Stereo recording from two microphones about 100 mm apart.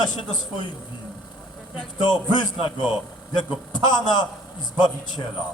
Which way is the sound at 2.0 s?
50° left (ahead or behind).